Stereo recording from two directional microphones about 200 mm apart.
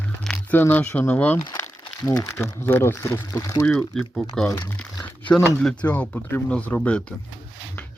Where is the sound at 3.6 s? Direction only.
Centre (ahead or behind).